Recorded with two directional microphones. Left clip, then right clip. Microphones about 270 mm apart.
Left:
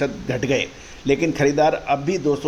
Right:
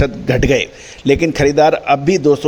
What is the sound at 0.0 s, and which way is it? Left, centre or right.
A man's voice, right.